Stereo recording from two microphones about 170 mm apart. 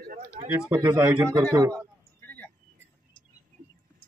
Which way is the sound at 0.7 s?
25° right (ahead or behind).